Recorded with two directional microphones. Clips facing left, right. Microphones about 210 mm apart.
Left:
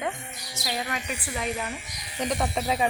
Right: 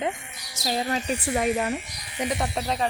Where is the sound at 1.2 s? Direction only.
50° right (ahead or behind).